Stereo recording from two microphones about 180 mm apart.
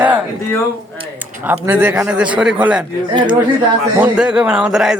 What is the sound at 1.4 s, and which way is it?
A man's voice, 10° right (ahead or behind).